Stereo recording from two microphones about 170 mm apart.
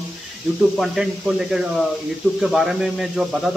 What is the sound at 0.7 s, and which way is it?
A man's voice, centre (ahead or behind).